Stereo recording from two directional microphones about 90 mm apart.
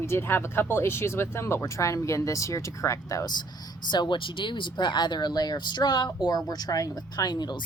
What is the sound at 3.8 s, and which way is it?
Speech, 55° left (ahead or behind).